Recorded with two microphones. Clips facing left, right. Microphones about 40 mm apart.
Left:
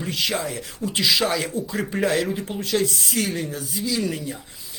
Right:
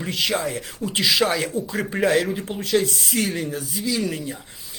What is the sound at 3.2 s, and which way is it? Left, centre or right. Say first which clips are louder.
Speech: right 1 dB; centre.